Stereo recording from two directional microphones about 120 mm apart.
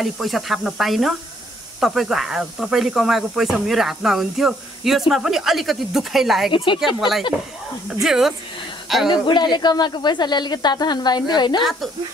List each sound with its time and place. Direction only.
0.0 s speech: centre (ahead or behind)
6.5 s speech: 45° left (ahead or behind)
7.0 s a woman's voice: centre (ahead or behind)
9.1 s speech: 40° left (ahead or behind)